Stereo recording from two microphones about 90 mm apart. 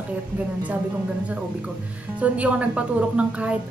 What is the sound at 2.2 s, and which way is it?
A woman's voice, 15° right (ahead or behind).